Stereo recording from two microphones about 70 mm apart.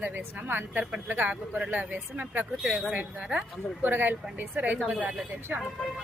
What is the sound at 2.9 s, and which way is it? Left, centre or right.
Speech, centre.